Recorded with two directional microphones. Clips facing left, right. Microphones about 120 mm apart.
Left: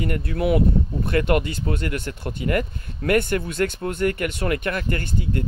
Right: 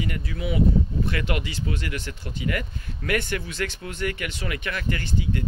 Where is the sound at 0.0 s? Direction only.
55° left (ahead or behind).